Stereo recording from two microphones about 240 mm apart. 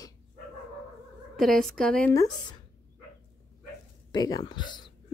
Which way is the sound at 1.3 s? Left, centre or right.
Centre.